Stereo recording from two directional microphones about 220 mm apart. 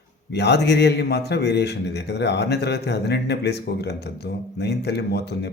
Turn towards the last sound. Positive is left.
turn(degrees=50)  # may be behind; listen again after turning